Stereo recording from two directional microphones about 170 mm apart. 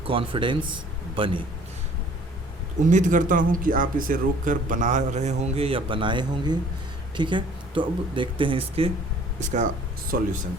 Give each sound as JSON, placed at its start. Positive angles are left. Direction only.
{"t": 0.0, "sound": "a man's voice", "side_deg": -30}
{"t": 2.8, "sound": "speech", "side_deg": -45}
{"t": 9.4, "sound": "speech", "side_deg": -45}
{"t": 10.1, "sound": "speech", "side_deg": -60}